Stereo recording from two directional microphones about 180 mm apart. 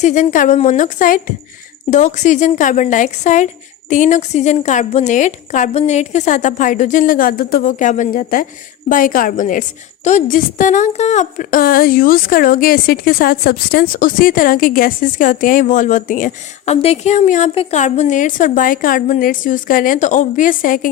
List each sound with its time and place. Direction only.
0.0 s a woman's voice: 45° left (ahead or behind)
16.8 s a woman's voice: 35° left (ahead or behind)